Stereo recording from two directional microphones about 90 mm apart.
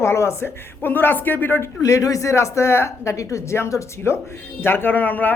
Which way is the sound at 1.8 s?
40° left (ahead or behind).